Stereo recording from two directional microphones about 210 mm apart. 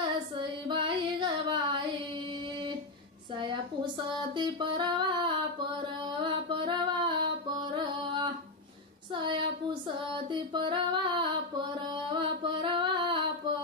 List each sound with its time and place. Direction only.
0.0 s female singing: 25° right (ahead or behind)
3.3 s music: 20° right (ahead or behind)
9.1 s female singing: 20° right (ahead or behind)